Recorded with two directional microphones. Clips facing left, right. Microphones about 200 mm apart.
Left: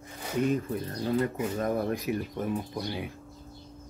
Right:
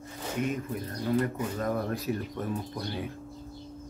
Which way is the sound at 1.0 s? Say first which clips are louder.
Even; 20° left (ahead or behind).